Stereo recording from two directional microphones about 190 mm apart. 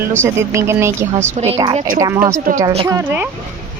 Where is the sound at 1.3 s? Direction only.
35° right (ahead or behind).